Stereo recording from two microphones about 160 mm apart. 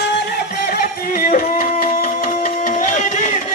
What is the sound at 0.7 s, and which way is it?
Music, 60° left (ahead or behind).